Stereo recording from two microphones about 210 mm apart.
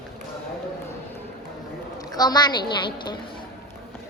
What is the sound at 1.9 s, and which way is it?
A woman's voice, 20° left (ahead or behind).